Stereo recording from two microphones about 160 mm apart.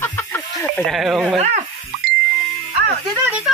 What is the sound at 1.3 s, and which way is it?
Speech, 45° right (ahead or behind).